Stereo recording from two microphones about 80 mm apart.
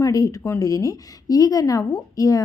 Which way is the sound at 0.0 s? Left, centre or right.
Left.